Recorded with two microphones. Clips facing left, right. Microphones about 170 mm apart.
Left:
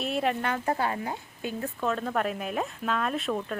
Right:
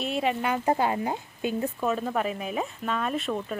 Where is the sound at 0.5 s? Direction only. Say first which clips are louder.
Right 3 dB; 20° right (ahead or behind).